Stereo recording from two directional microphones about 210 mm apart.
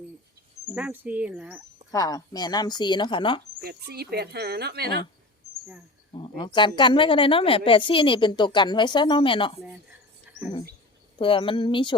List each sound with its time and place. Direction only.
0.8 s speech: 5° right (ahead or behind)
1.9 s speech: 15° left (ahead or behind)
3.6 s speech: 50° right (ahead or behind)
6.1 s speech: 25° left (ahead or behind)
10.3 s a sound: 10° right (ahead or behind)
11.2 s speech: 25° left (ahead or behind)